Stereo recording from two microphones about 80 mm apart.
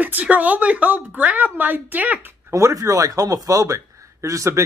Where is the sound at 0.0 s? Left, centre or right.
Centre.